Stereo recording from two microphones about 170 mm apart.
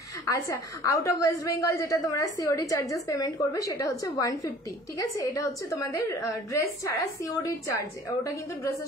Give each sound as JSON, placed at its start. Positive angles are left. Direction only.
{"t": 0.2, "sound": "a woman's voice", "side_deg": 20}